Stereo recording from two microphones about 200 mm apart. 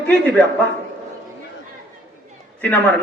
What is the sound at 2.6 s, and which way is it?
Speech, 10° left (ahead or behind).